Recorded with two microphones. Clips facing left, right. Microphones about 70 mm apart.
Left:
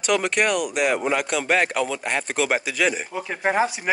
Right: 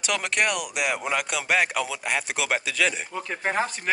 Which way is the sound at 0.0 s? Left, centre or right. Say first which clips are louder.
Left 4 dB; centre.